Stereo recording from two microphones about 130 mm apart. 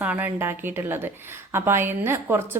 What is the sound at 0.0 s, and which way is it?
A woman's voice, 15° right (ahead or behind).